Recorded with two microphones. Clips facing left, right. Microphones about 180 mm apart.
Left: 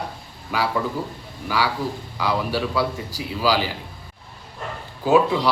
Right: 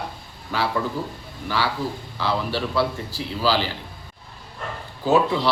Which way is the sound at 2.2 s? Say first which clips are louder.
Left 1 dB; 10° left (ahead or behind).